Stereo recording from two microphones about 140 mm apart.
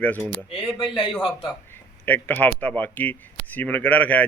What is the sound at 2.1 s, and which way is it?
Speech, 10° left (ahead or behind).